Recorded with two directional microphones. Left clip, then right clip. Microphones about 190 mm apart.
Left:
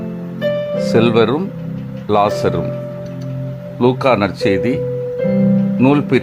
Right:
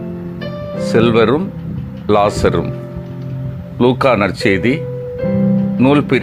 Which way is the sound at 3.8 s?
Centre (ahead or behind).